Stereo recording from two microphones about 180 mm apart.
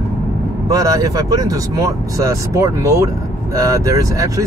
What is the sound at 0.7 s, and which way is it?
Speech, 20° right (ahead or behind).